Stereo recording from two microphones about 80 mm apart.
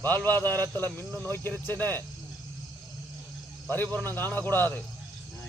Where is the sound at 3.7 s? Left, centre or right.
Left.